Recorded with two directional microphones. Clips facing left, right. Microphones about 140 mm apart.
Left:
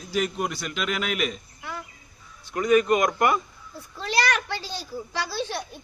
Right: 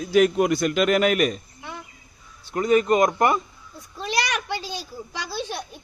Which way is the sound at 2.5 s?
30° right (ahead or behind).